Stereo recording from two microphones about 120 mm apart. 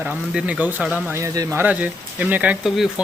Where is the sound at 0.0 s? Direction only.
5° right (ahead or behind).